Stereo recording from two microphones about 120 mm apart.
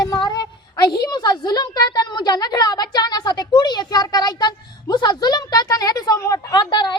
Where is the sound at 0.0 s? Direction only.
30° left (ahead or behind).